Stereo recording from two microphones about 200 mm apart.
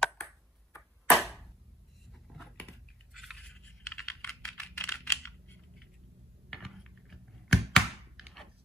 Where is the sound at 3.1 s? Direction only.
Centre (ahead or behind).